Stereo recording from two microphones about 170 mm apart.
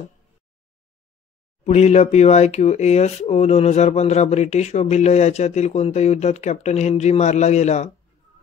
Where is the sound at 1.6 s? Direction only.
40° left (ahead or behind).